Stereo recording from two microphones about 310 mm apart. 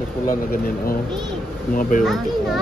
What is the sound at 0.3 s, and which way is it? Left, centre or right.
Speech, left.